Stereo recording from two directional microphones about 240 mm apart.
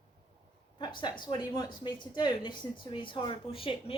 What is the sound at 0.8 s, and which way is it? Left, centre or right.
Speech, centre.